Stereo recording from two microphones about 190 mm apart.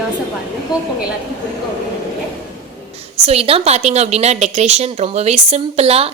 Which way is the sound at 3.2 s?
30° right (ahead or behind).